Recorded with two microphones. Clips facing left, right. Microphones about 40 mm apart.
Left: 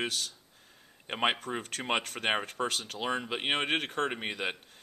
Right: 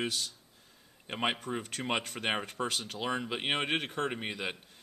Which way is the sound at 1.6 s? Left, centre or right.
Left.